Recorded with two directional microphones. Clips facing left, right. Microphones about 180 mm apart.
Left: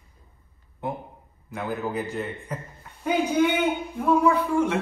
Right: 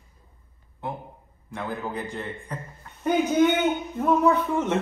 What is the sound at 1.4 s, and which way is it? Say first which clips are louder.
A man's voice: left 2 dB; 5° left (ahead or behind).